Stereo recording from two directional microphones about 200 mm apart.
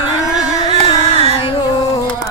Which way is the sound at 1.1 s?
30° right (ahead or behind).